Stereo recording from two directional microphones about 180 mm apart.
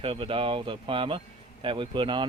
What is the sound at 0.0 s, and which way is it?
Speech, 30° right (ahead or behind).